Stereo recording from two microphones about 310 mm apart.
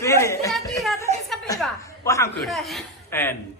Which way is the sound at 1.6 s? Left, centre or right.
Centre.